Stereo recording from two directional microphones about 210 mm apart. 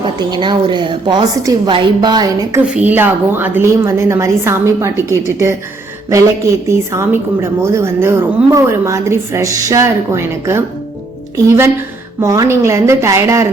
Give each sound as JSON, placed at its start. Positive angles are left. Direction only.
{"t": 0.2, "sound": "a woman's voice", "side_deg": -20}
{"t": 2.6, "sound": "a woman's voice", "side_deg": -5}